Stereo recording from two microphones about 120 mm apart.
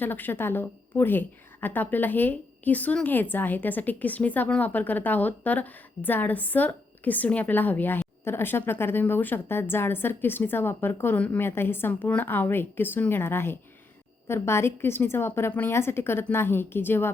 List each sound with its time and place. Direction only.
0.0 s a woman's voice: 15° left (ahead or behind)